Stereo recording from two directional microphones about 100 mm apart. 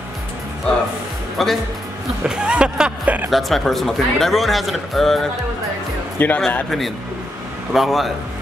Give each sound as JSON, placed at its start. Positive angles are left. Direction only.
{"t": 1.4, "sound": "speech", "side_deg": 0}
{"t": 3.3, "sound": "speech", "side_deg": 0}
{"t": 6.1, "sound": "speech", "side_deg": 15}
{"t": 6.4, "sound": "speech", "side_deg": 5}